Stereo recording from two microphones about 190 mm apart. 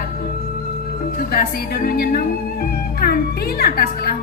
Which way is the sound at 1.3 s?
55° left (ahead or behind).